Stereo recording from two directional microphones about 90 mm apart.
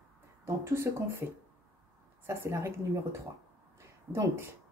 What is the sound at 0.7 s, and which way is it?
Speech, 30° right (ahead or behind).